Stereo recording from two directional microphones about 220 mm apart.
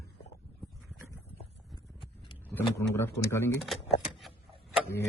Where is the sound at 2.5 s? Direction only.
10° left (ahead or behind).